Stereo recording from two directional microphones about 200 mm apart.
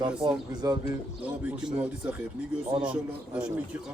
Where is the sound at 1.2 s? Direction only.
5° right (ahead or behind).